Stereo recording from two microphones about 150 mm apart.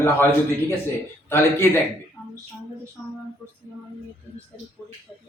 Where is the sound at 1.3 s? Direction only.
15° left (ahead or behind).